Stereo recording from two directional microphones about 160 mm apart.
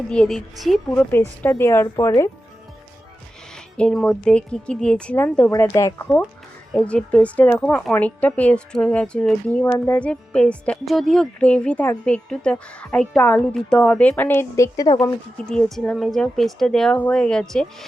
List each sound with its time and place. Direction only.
0.1 s a woman's voice: 5° left (ahead or behind)
1.4 s a woman's voice: 15° left (ahead or behind)
3.5 s a woman's voice: 5° left (ahead or behind)
6.7 s a woman's voice: 5° left (ahead or behind)
9.6 s a woman's voice: 15° left (ahead or behind)
15.4 s a woman's voice: 5° left (ahead or behind)